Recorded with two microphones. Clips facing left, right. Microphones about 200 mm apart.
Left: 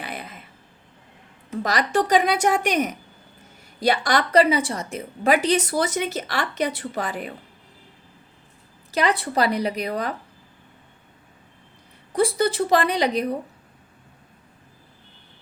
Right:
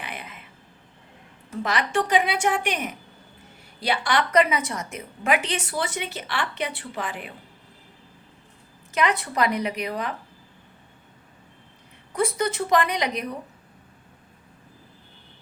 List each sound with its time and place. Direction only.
0.0 s a sound: 40° left (ahead or behind)
1.6 s a woman's voice: 40° left (ahead or behind)
8.9 s a woman's voice: 35° left (ahead or behind)
12.1 s a woman's voice: 35° left (ahead or behind)